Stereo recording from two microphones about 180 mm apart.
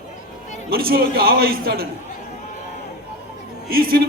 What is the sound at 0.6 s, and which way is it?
A man's voice, 55° right (ahead or behind).